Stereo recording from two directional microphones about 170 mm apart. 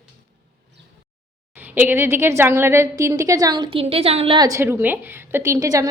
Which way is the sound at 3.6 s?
35° right (ahead or behind).